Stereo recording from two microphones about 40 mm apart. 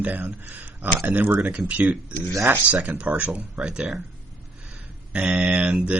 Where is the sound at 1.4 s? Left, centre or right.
Right.